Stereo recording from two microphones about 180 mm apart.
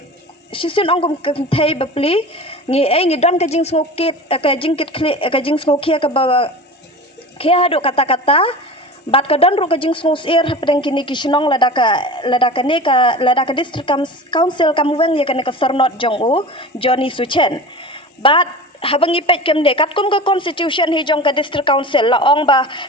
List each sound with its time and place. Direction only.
0.5 s a woman's voice: 30° left (ahead or behind)